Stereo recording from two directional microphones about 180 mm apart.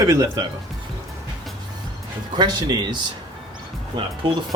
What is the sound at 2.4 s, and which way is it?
Speech, 25° right (ahead or behind).